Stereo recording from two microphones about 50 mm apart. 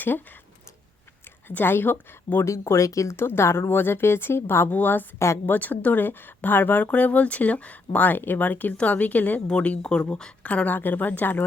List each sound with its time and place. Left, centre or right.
0.0 s speech: left
1.5 s speech: left
2.4 s speech: left
3.2 s speech: left
4.7 s speech: left
9.5 s speech: centre
10.5 s speech: left